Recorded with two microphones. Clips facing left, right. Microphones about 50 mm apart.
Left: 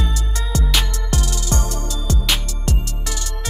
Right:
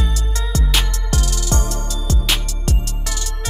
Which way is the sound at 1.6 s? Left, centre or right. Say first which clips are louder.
Even; right.